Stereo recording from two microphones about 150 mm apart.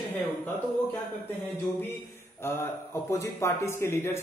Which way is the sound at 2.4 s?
15° left (ahead or behind).